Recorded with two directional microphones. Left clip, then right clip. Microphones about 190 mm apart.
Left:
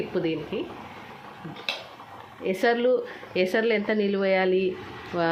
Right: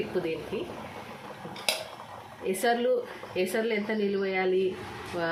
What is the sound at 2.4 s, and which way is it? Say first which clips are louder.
A woman's voice: left 4 dB; 35° left (ahead or behind).